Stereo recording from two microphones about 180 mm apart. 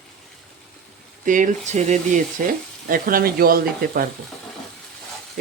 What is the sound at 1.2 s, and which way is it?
Speech, 45° right (ahead or behind).